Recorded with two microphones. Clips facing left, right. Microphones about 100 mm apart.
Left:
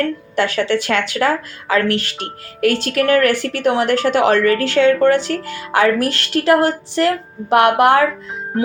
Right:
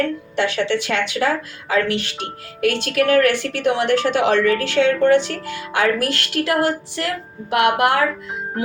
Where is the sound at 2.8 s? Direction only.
40° left (ahead or behind).